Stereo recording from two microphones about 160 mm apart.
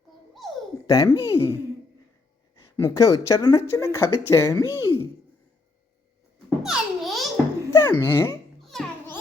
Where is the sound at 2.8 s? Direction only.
20° left (ahead or behind).